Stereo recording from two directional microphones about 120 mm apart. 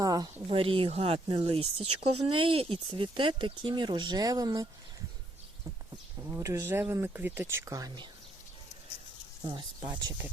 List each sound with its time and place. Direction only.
0.0 s a sound: 30° right (ahead or behind)
0.4 s speech: 50° right (ahead or behind); by 4.7 s 30° right (ahead or behind)
6.2 s speech: 20° right (ahead or behind)
9.4 s speech: 45° right (ahead or behind)